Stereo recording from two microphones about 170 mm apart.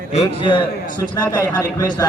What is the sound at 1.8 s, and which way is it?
Speech, 20° left (ahead or behind).